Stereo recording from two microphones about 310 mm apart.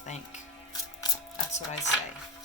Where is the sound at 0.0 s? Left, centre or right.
Left.